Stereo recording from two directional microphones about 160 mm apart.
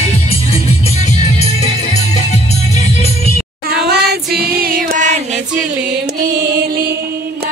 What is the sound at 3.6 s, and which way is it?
Music, 80° right.